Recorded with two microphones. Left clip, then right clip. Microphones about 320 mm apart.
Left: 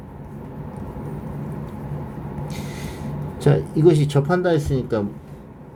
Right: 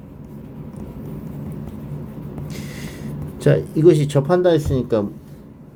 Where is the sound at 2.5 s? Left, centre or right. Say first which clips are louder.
Left 1 dB; centre.